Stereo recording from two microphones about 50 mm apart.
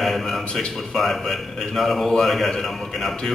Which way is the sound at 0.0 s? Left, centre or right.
Centre.